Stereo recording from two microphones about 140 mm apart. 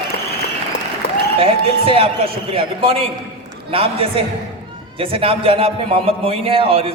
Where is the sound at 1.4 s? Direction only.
40° right (ahead or behind).